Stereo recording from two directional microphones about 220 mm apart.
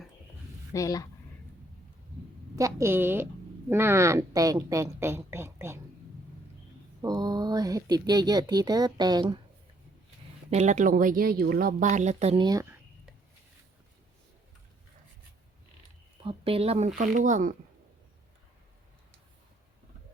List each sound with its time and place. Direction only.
0.7 s speech: 15° left (ahead or behind)
2.6 s speech: 15° right (ahead or behind)
7.0 s speech: 15° right (ahead or behind)
10.5 s speech: 30° right (ahead or behind)
16.2 s speech: 25° right (ahead or behind)